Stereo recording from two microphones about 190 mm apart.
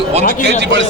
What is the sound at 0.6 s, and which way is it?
Speech, 70° right (ahead or behind).